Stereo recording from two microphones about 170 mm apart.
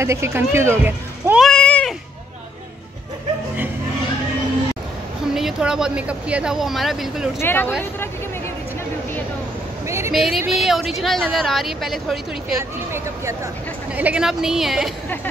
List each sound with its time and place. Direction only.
0.0 s speech: 15° right (ahead or behind)
1.4 s a sound: 5° left (ahead or behind)
5.3 s speech: 5° right (ahead or behind)
7.3 s speech: 10° left (ahead or behind)
9.8 s speech: 15° right (ahead or behind)
10.1 s speech: centre (ahead or behind)
12.5 s speech: 15° right (ahead or behind)